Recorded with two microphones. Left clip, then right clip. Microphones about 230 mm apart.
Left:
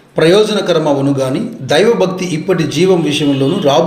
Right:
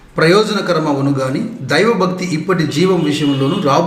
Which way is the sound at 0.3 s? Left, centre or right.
Right.